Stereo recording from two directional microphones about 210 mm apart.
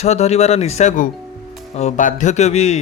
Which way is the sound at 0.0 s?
30° left (ahead or behind).